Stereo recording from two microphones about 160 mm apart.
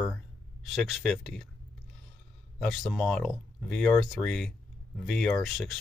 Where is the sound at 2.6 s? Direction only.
Centre (ahead or behind).